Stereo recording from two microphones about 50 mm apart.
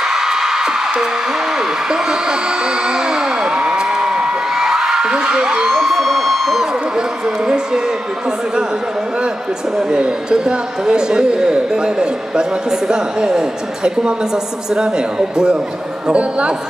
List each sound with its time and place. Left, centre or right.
0.0 s music: centre
1.6 s a sound: centre
5.7 s emergency vehicle: centre
7.0 s speech: centre
9.8 s a man's voice: centre